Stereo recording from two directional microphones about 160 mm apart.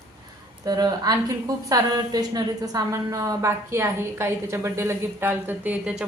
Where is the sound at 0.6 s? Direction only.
25° right (ahead or behind).